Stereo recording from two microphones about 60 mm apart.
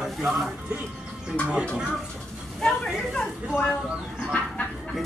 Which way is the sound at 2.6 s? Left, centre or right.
Centre.